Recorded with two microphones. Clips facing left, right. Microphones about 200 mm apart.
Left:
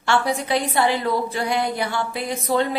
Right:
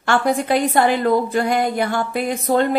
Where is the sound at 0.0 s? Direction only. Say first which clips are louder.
Right 3 dB; 50° right (ahead or behind).